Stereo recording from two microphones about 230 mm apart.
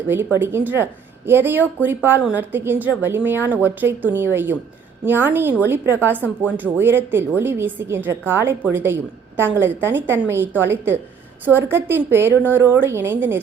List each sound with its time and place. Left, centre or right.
0.1 s a woman's voice: centre